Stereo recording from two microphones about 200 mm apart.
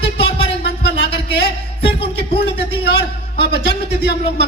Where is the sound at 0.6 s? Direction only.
55° left (ahead or behind).